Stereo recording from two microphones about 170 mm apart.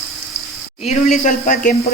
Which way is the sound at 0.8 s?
45° left (ahead or behind).